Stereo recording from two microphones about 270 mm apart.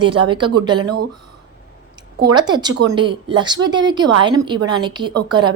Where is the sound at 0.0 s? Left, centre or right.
Centre.